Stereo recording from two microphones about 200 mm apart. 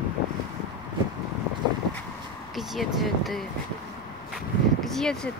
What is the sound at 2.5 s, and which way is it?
Speech, centre (ahead or behind).